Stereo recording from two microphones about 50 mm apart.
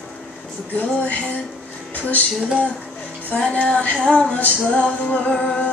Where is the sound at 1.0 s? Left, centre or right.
Left.